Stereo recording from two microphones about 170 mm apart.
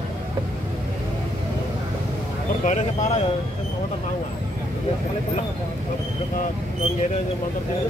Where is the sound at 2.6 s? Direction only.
45° left (ahead or behind).